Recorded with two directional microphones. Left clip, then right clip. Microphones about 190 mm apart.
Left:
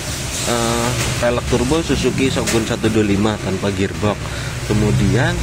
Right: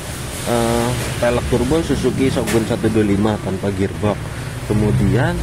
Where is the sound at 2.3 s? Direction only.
5° right (ahead or behind).